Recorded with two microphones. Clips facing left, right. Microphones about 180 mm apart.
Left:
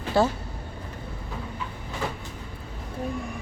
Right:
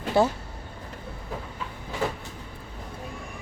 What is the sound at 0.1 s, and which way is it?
Speech, 20° right (ahead or behind).